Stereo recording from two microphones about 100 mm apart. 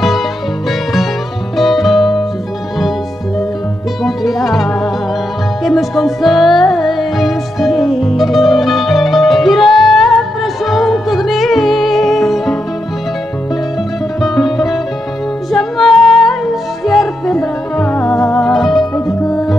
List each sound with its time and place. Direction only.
1.6 s music: centre (ahead or behind)
4.0 s music: centre (ahead or behind)
14.2 s music: centre (ahead or behind)
19.0 s music: 40° left (ahead or behind)